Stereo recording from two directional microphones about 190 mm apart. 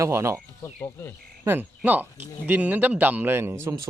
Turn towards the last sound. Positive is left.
turn(degrees=-15)  # may be behind; listen again after turning